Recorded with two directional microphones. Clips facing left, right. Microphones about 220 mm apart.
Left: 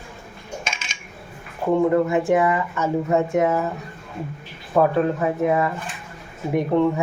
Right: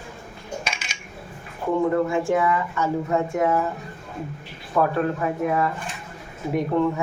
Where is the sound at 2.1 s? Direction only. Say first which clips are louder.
Left 3 dB; 20° left (ahead or behind).